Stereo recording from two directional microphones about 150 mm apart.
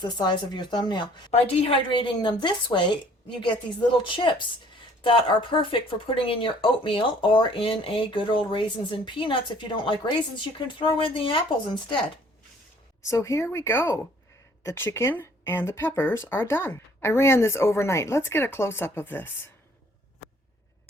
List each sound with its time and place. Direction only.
0.0 s speech: 30° left (ahead or behind)
13.1 s speech: 20° left (ahead or behind)